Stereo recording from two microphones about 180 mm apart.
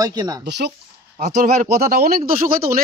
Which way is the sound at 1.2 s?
55° right (ahead or behind).